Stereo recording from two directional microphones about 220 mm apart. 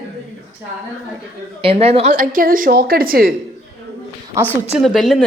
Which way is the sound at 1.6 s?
25° right (ahead or behind).